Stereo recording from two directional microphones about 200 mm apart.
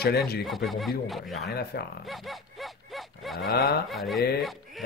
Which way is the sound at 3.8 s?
Centre (ahead or behind).